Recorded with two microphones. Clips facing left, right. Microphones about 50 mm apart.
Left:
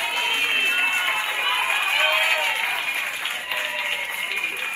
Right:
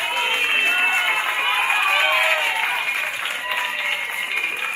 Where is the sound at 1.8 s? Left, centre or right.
Right.